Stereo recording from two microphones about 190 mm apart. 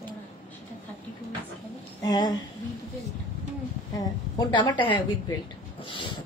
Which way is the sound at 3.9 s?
20° left (ahead or behind).